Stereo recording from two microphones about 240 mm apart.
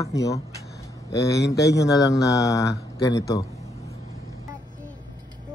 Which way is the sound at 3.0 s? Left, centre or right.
Centre.